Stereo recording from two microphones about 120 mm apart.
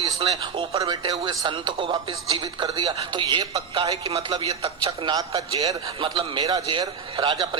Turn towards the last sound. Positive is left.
turn(degrees=-35)  # may be behind; listen again after turning